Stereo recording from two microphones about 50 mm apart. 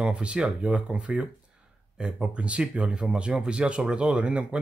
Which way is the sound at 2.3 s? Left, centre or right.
Right.